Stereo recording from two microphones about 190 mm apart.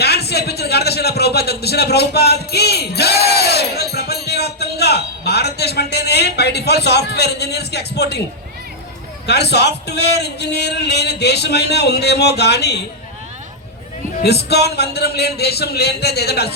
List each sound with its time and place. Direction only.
0.0 s a man's voice: 60° left (ahead or behind)
9.2 s a man's voice: 60° left (ahead or behind)
14.5 s a man's voice: 60° left (ahead or behind)